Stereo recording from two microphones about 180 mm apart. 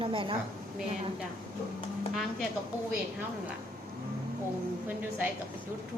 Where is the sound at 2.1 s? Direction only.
Centre (ahead or behind).